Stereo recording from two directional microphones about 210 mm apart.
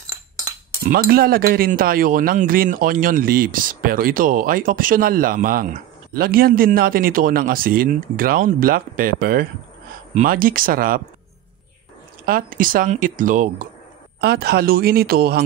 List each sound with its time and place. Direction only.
0.8 s speech: 45° right (ahead or behind)
12.3 s speech: 40° right (ahead or behind)